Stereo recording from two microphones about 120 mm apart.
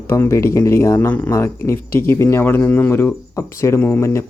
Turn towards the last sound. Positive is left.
turn(degrees=20)  # may be behind; listen again after turning